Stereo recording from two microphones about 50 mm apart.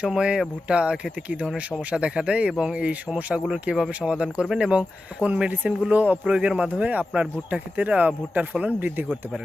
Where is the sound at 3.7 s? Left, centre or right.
Centre.